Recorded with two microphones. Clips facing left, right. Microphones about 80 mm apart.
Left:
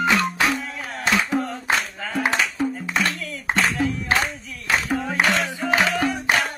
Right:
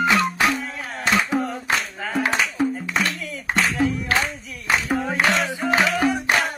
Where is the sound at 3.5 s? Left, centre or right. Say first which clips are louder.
Right 1 dB; centre.